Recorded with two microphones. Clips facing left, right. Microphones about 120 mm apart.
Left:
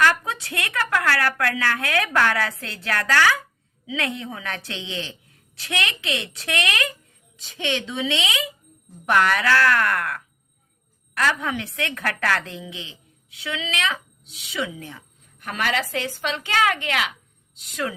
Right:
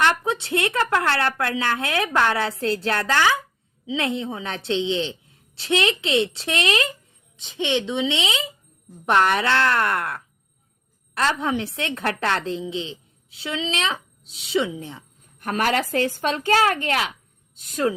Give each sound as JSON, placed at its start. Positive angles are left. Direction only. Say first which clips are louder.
{"t": 0.0, "sound": "a woman's voice", "louder": "even", "side_deg": -25}
{"t": 15.4, "sound": "a woman's voice", "louder": "right 3 dB", "side_deg": -40}